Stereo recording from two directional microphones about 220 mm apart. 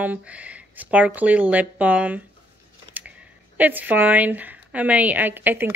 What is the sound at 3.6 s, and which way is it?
Speech, 10° right (ahead or behind).